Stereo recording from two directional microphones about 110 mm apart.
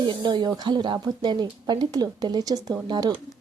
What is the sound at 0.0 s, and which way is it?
Speech, 45° right (ahead or behind).